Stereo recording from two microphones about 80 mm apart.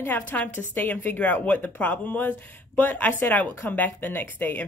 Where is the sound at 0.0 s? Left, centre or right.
Left.